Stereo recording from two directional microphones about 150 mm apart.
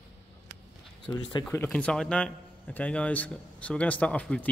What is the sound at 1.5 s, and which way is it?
A man's voice, 10° left (ahead or behind).